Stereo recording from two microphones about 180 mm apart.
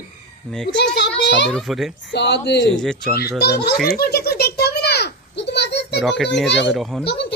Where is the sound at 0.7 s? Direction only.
70° left (ahead or behind).